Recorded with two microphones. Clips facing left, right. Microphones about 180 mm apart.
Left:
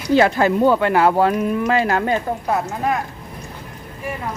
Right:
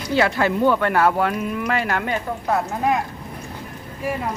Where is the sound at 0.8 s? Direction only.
25° left (ahead or behind).